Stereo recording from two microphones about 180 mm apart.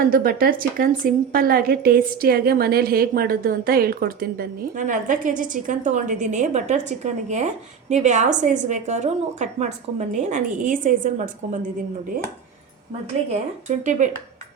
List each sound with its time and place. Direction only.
0.0 s a woman's voice: 50° right (ahead or behind)
13.7 s a woman's voice: 45° right (ahead or behind)